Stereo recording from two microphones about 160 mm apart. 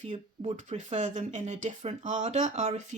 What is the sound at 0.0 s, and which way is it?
Speech, 50° right (ahead or behind).